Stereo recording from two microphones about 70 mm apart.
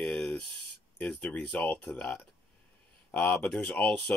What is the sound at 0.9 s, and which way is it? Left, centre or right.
Speech, centre.